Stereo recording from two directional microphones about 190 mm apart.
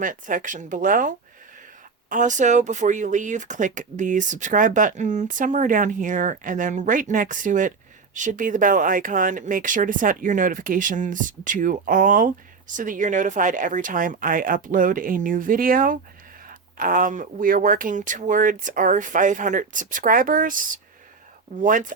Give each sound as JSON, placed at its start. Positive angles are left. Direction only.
{"t": 0.0, "sound": "speech", "side_deg": -45}